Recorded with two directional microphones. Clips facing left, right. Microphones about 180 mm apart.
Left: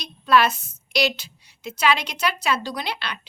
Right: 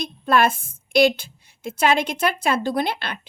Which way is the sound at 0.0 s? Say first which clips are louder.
Even; 50° right (ahead or behind).